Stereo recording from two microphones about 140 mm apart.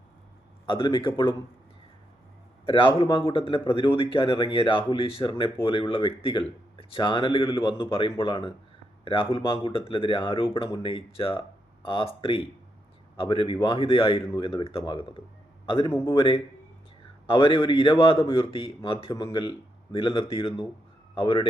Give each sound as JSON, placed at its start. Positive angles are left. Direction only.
{"t": 0.7, "sound": "speech", "side_deg": 35}
{"t": 2.6, "sound": "a man's voice", "side_deg": 35}